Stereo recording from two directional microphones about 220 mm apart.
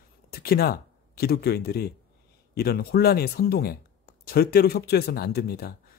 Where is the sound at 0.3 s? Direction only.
45° left (ahead or behind).